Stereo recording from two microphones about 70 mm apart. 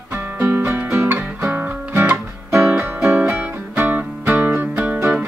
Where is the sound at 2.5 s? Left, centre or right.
Right.